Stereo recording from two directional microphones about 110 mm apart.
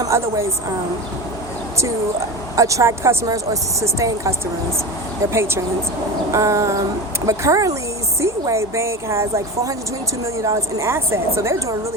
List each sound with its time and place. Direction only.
0.0 s a woman's voice: 25° right (ahead or behind)
2.6 s speech: 30° right (ahead or behind)